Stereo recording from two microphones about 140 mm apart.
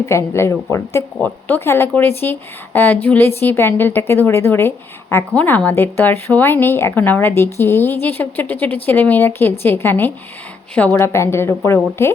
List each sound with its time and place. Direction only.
0.0 s a woman's voice: 20° left (ahead or behind)